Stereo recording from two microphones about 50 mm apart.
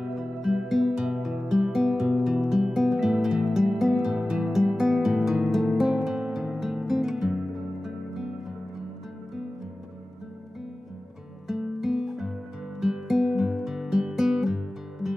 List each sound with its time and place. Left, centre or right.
0.1 s music: centre
11.4 s music: centre